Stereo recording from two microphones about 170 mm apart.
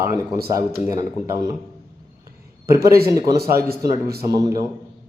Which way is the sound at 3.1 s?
20° right (ahead or behind).